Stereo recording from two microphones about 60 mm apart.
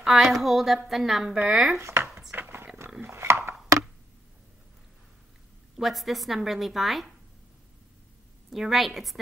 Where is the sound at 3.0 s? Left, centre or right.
Right.